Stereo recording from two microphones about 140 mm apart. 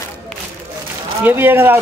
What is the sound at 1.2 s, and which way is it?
Speech, 15° right (ahead or behind).